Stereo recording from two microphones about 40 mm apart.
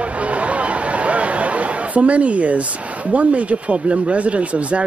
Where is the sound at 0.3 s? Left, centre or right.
Right.